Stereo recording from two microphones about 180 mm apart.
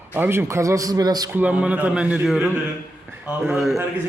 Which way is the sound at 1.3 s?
10° right (ahead or behind).